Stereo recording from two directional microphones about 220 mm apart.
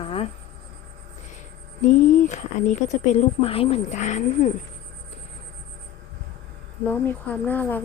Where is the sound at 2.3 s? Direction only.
35° left (ahead or behind).